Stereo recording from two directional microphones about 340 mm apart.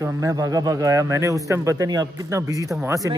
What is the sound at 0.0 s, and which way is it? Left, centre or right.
A man's voice, centre.